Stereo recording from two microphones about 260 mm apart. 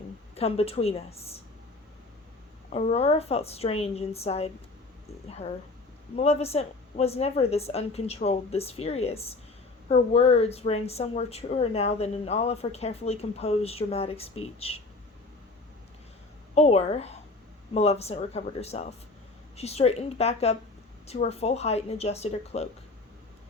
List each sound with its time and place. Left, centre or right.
0.3 s speech: left
2.7 s speech: left
16.6 s speech: left